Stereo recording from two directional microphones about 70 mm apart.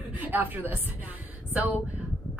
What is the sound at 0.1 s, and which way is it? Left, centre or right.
A woman's voice, right.